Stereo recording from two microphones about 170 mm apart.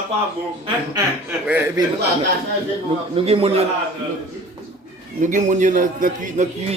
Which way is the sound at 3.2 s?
35° right (ahead or behind).